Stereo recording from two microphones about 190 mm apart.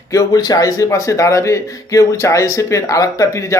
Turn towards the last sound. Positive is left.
turn(degrees=15)  # may be behind; listen again after turning